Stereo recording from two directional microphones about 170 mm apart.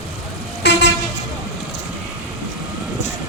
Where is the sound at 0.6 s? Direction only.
80° left.